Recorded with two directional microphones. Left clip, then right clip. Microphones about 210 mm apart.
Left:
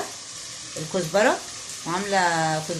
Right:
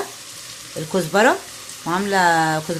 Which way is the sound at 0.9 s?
45° right (ahead or behind).